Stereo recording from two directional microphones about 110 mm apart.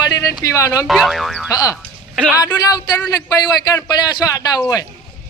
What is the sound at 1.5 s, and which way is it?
Speech, 35° left (ahead or behind).